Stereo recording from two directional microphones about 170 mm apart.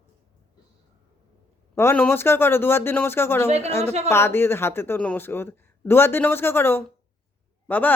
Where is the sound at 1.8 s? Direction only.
10° left (ahead or behind).